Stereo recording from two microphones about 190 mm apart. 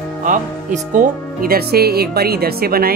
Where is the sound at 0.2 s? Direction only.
45° right (ahead or behind).